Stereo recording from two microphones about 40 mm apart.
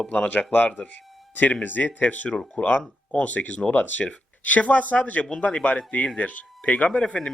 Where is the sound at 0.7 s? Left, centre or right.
Left.